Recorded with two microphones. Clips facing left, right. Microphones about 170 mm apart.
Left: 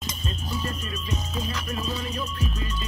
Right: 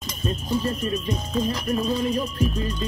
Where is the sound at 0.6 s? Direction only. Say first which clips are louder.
Right 8 dB; 30° right (ahead or behind).